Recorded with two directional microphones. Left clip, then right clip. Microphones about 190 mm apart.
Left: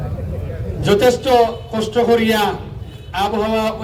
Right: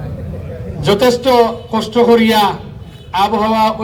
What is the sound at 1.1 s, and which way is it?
A man's voice, 15° right (ahead or behind).